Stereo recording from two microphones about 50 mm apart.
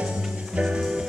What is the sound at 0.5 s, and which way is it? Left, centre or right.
Music, centre.